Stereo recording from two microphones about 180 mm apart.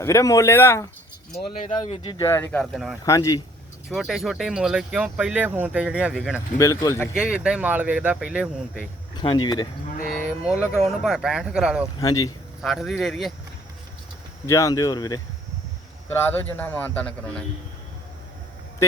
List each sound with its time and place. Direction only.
0.0 s speech: 15° left (ahead or behind)
1.6 s speech: 35° left (ahead or behind)
2.1 s speech: 15° left (ahead or behind)
2.7 s speech: centre (ahead or behind)
3.0 s speech: 20° left (ahead or behind)
3.8 s speech: centre (ahead or behind)
6.6 s speech: 15° left (ahead or behind)
7.1 s speech: 5° right (ahead or behind)
9.1 s speech: 25° left (ahead or behind)
10.2 s speech: 5° right (ahead or behind)
11.9 s speech: 20° left (ahead or behind)
12.6 s speech: centre (ahead or behind)
14.4 s speech: 15° left (ahead or behind)
18.8 s vehicle: 15° left (ahead or behind)